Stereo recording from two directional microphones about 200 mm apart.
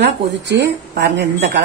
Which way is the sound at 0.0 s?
60° right (ahead or behind).